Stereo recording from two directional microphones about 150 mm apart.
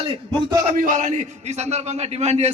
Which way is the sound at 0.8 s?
60° right (ahead or behind).